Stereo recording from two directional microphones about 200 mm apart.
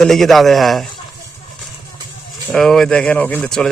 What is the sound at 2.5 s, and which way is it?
Speech, centre (ahead or behind).